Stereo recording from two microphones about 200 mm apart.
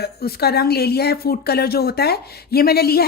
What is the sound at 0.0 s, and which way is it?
A woman's voice, 50° left (ahead or behind).